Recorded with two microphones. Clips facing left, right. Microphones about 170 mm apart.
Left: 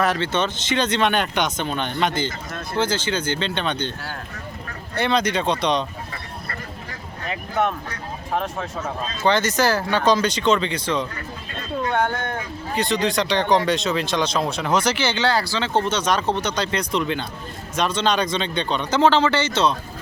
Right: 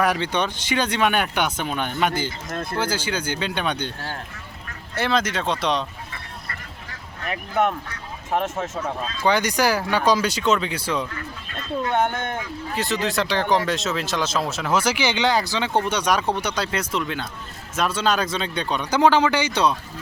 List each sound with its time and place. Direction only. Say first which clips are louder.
0.0 s speech: left 1 dB; 15° right (ahead or behind)
4.9 s speech: left 2 dB; centre (ahead or behind)
9.2 s speech: left 1 dB; 10° right (ahead or behind)
11.9 s speech: even; 20° right (ahead or behind)
12.7 s speech: left 3 dB; 5° right (ahead or behind)